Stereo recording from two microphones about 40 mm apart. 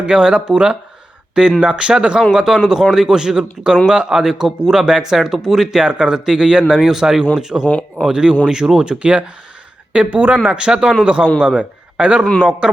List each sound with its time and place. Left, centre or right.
0.0 s speech: right
2.3 s a man's voice: centre